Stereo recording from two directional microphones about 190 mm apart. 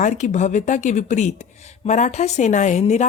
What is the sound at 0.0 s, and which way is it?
A woman's voice, 40° left (ahead or behind).